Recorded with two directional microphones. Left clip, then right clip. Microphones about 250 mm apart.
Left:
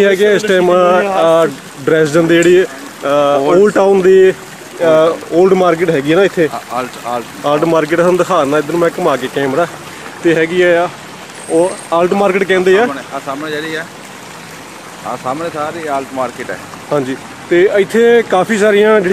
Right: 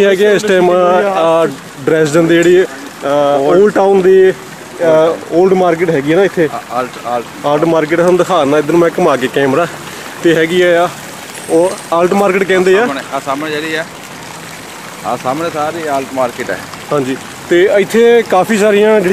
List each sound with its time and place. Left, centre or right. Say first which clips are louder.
0.0 s speech: right 1 dB; centre
6.7 s speech: right 2 dB; left
7.4 s speech: even; centre
8.3 s speech: right 2 dB; right
10.2 s speech: right 1 dB; centre
12.9 s speech: right 4 dB; right
15.0 s speech: right 3 dB; right
17.5 s speech: right 1 dB; right
18.3 s speech: right 1 dB; centre